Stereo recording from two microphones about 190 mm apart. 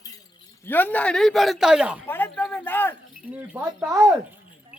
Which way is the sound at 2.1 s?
10° left (ahead or behind).